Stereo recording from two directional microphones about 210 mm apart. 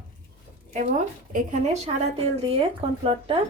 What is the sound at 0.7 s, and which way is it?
A woman's voice, 35° right (ahead or behind).